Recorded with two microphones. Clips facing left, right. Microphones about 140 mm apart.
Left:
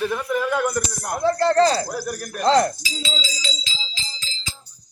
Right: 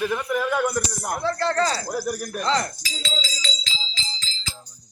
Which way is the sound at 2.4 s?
50° left (ahead or behind).